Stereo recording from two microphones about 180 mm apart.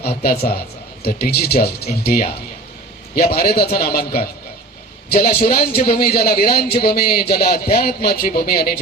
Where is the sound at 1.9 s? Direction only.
50° left (ahead or behind).